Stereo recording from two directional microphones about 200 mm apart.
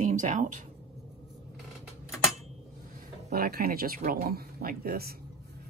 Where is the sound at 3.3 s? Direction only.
50° right (ahead or behind).